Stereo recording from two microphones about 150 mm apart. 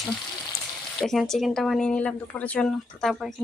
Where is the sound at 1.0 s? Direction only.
Centre (ahead or behind).